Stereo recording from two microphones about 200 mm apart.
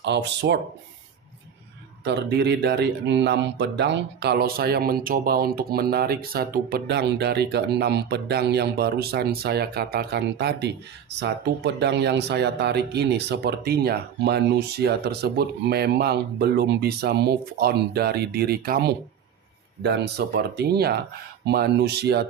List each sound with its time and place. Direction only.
0.0 s speech: 60° right (ahead or behind)
2.0 s speech: 55° right (ahead or behind)